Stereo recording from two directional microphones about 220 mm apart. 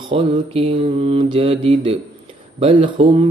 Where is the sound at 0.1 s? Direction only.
25° right (ahead or behind).